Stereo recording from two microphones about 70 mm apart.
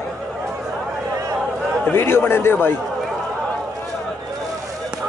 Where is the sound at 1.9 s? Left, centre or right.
Left.